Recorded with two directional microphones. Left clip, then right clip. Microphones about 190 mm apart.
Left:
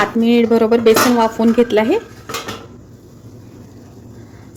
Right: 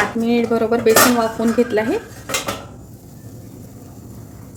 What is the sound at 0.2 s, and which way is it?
Speech, 35° left (ahead or behind).